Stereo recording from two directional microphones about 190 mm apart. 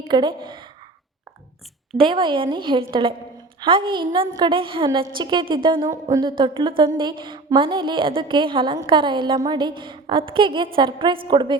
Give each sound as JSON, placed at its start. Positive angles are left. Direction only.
{"t": 0.1, "sound": "a woman's voice", "side_deg": -25}
{"t": 2.0, "sound": "a woman's voice", "side_deg": -25}